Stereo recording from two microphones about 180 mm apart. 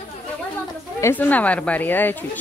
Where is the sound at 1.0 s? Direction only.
10° left (ahead or behind).